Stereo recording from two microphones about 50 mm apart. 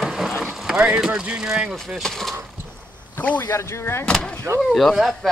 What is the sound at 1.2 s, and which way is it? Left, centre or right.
Speech, centre.